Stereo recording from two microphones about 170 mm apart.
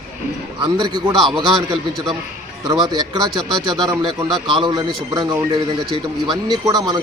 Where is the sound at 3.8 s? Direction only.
20° right (ahead or behind).